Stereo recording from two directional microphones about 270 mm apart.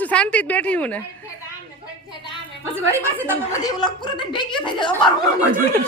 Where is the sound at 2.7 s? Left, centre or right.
Centre.